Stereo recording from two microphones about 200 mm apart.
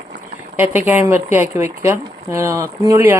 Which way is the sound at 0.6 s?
10° right (ahead or behind).